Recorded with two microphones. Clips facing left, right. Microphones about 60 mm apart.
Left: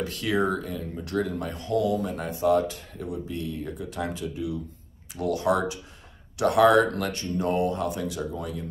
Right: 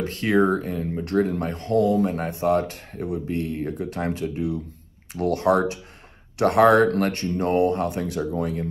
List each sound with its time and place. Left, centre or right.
0.0 s speech: right